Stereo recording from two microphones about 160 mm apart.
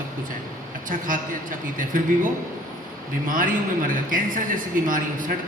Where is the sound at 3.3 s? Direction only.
60° right (ahead or behind).